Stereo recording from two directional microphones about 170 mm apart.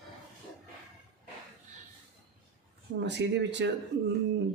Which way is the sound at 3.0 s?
90° right.